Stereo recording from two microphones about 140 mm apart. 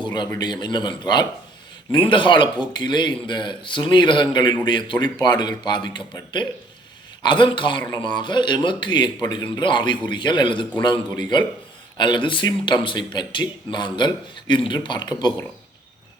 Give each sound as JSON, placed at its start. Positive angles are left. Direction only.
{"t": 0.0, "sound": "a sound", "side_deg": 30}
{"t": 0.3, "sound": "speech", "side_deg": 30}
{"t": 11.9, "sound": "speech", "side_deg": 35}